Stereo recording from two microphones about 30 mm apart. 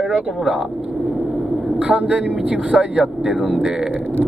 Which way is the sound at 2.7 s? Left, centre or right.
Right.